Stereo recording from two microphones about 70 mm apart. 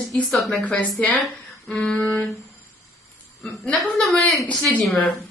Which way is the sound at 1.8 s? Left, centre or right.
Centre.